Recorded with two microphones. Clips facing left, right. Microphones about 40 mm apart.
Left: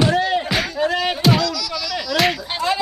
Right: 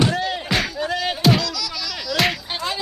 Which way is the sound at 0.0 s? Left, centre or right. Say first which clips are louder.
Left 4 dB; centre.